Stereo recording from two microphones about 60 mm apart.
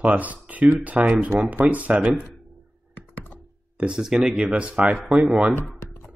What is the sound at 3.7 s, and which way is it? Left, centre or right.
Speech, centre.